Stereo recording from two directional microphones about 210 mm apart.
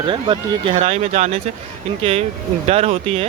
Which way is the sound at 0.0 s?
25° right (ahead or behind).